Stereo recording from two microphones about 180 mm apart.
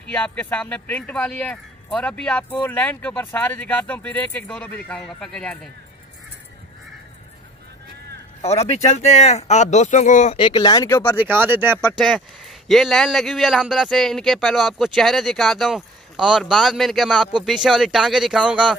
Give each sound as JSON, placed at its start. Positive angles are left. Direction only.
{"t": 0.0, "sound": "speech", "side_deg": 10}
{"t": 8.4, "sound": "speech", "side_deg": 35}
{"t": 10.3, "sound": "speech", "side_deg": 30}
{"t": 11.1, "sound": "speech", "side_deg": -10}
{"t": 12.0, "sound": "speech", "side_deg": 0}